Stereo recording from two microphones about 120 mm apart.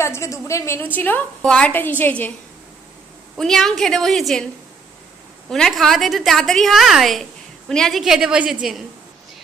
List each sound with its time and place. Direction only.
0.0 s a woman's voice: 25° left (ahead or behind)
3.3 s a woman's voice: 5° left (ahead or behind)
5.5 s a woman's voice: centre (ahead or behind)